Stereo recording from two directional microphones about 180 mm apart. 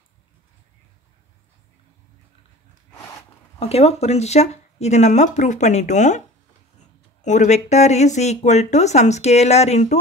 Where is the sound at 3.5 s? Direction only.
35° left (ahead or behind).